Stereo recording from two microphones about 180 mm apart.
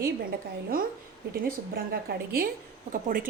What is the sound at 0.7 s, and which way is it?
Speech, 55° right (ahead or behind).